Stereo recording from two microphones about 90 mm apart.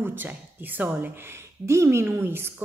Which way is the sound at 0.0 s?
20° right (ahead or behind).